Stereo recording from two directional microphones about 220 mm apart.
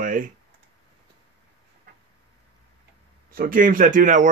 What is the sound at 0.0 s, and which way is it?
Clicking, 40° right (ahead or behind).